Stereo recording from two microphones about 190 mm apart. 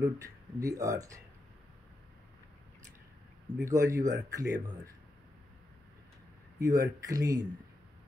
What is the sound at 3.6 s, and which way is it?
Speech, 15° right (ahead or behind).